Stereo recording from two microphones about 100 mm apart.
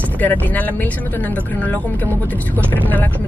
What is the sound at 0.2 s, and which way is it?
Speech, 20° left (ahead or behind).